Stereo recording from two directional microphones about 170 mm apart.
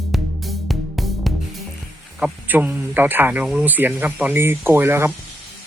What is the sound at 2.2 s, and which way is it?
Speech, 10° right (ahead or behind).